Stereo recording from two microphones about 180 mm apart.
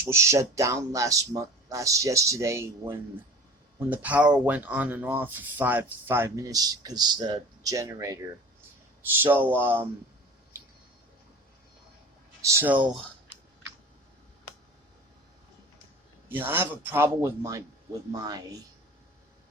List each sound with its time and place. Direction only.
0.0 s speech: 15° right (ahead or behind)
12.4 s speech: 15° right (ahead or behind)
16.3 s speech: 10° right (ahead or behind)